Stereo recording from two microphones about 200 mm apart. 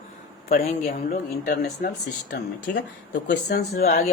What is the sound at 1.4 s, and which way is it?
Speech, 45° left (ahead or behind).